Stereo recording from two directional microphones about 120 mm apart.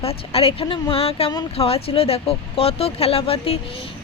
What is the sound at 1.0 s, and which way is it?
Speech, 55° left (ahead or behind).